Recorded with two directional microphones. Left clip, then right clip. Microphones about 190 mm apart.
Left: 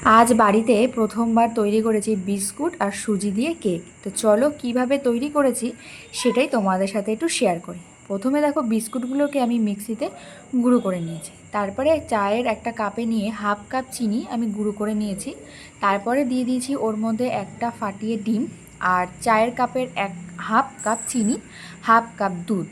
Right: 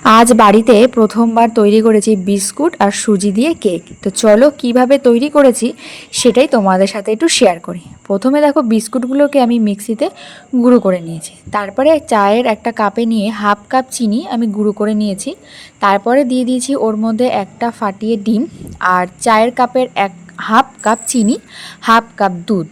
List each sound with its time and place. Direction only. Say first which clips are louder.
0.0 s a woman's voice: right 8 dB; 50° right (ahead or behind)